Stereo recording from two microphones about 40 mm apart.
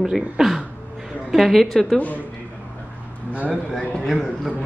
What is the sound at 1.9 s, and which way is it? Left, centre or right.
Speech, left.